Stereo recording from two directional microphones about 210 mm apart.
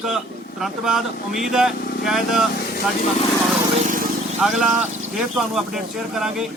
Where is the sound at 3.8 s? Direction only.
40° right (ahead or behind).